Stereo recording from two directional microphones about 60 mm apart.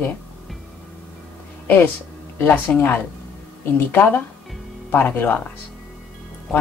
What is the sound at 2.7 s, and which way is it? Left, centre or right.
Speech, left.